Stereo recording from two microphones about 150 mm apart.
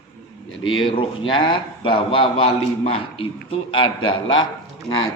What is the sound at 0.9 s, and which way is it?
A man's voice, 35° left (ahead or behind).